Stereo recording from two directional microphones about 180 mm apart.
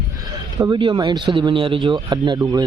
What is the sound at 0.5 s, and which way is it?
Speech, 20° right (ahead or behind).